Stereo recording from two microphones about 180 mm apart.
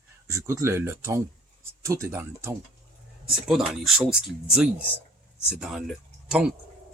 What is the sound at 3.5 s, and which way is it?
Speech, 5° right (ahead or behind).